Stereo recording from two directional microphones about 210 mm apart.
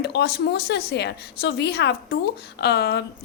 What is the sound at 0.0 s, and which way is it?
A woman's voice, 50° left (ahead or behind).